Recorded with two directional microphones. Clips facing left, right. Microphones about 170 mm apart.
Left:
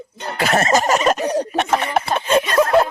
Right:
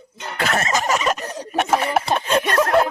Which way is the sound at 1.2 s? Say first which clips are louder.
Left 11 dB; 65° left (ahead or behind).